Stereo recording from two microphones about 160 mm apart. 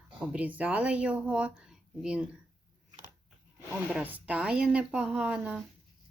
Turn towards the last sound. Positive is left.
turn(degrees=-5)  # may be behind; listen again after turning